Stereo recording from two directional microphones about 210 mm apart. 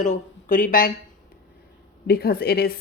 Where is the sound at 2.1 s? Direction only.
45° left (ahead or behind).